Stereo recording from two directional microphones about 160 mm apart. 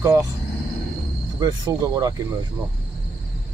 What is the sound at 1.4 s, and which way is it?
Speech, 25° right (ahead or behind).